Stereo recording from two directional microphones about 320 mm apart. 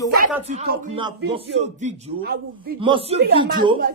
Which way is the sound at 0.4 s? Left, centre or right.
Right.